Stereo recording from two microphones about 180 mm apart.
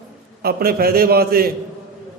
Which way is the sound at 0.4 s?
60° right (ahead or behind).